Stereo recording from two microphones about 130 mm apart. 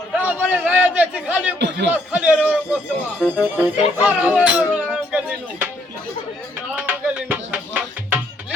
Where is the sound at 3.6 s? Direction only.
10° right (ahead or behind).